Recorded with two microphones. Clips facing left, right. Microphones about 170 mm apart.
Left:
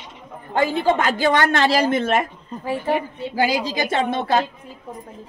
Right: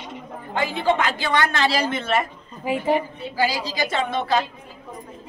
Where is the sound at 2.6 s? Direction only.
15° right (ahead or behind).